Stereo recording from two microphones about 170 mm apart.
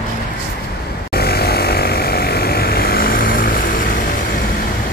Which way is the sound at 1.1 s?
65° left (ahead or behind).